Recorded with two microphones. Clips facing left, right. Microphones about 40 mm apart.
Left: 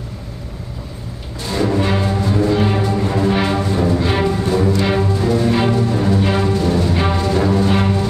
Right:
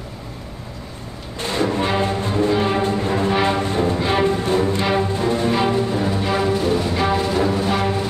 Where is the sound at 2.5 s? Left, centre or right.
Centre; by 5.4 s right.